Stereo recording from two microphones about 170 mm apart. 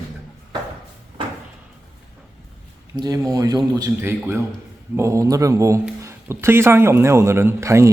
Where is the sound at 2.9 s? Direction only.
20° right (ahead or behind).